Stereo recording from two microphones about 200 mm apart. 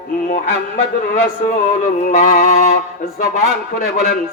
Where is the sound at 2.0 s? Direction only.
40° left (ahead or behind).